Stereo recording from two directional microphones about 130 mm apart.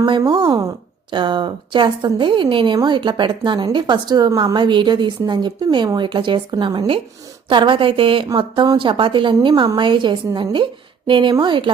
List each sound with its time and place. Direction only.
0.0 s a woman's voice: 35° right (ahead or behind)